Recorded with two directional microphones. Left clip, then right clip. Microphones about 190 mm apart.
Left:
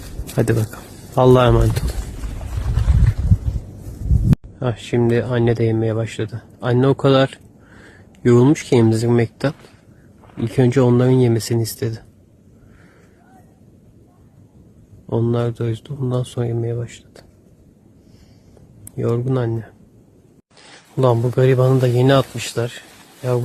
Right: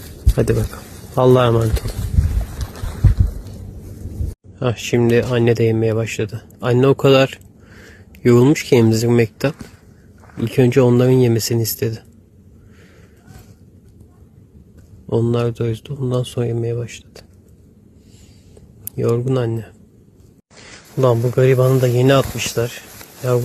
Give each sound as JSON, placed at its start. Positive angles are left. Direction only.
{"t": 0.0, "sound": "a sound", "side_deg": 15}
{"t": 0.9, "sound": "speech", "side_deg": 15}
{"t": 4.6, "sound": "speech", "side_deg": 0}
{"t": 15.0, "sound": "speech", "side_deg": 0}
{"t": 18.9, "sound": "speech", "side_deg": 0}
{"t": 21.0, "sound": "speech", "side_deg": 15}